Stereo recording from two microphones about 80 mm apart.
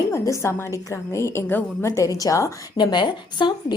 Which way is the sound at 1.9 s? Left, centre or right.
Left.